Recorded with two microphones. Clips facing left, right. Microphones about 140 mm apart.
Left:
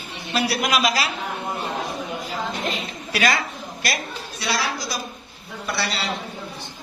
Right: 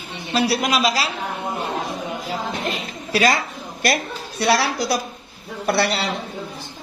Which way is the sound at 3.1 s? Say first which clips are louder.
Right 4 dB; 35° right (ahead or behind).